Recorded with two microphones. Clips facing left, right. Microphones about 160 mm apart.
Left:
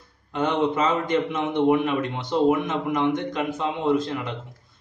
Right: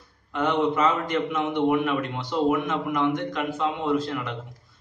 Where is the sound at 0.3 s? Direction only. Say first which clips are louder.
Left 1 dB; 20° left (ahead or behind).